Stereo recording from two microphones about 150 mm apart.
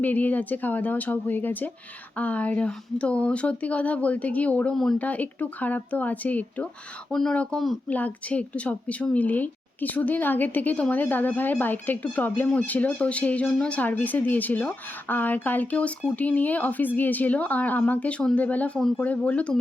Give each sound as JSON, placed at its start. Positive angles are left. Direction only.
{"t": 0.0, "sound": "a woman's voice", "side_deg": 10}